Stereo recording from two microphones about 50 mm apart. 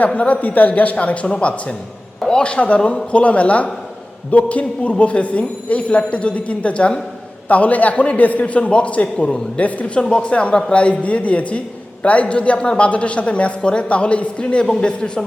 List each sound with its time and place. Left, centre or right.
0.0 s a man's voice: left
9.1 s a man's voice: centre
9.6 s a man's voice: left
10.0 s a man's voice: centre